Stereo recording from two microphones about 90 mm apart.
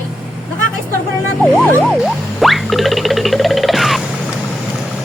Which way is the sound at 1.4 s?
5° left (ahead or behind).